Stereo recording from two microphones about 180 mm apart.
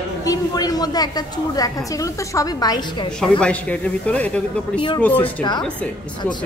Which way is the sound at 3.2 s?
5° left (ahead or behind).